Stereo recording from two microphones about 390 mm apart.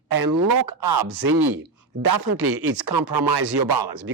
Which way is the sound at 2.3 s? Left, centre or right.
Right.